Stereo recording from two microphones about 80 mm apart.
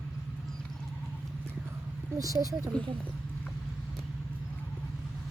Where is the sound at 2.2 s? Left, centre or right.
Right.